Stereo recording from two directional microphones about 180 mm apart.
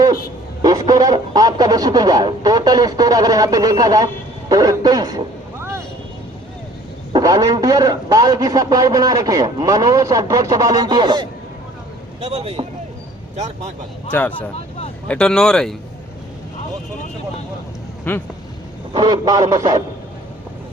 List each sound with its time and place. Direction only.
0.6 s speech: 20° right (ahead or behind)
7.1 s speech: 20° right (ahead or behind)
12.2 s speech: 35° right (ahead or behind)
14.1 s speech: 10° left (ahead or behind)
18.1 s speech: 10° left (ahead or behind)
18.9 s speech: 25° right (ahead or behind)